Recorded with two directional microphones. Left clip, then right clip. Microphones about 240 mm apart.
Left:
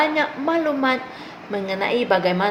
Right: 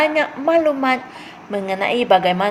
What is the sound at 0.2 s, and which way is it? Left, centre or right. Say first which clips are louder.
A woman's voice: right 5 dB; right.